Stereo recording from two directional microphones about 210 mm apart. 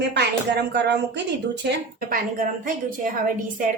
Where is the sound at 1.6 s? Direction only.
40° right (ahead or behind).